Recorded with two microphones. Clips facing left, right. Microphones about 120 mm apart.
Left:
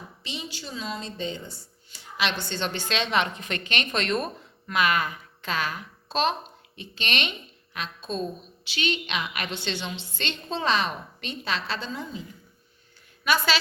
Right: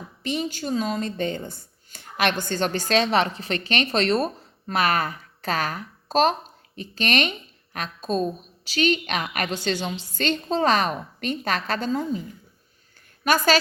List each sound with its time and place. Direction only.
0.2 s a woman's voice: 50° right (ahead or behind)
13.2 s a woman's voice: 45° right (ahead or behind)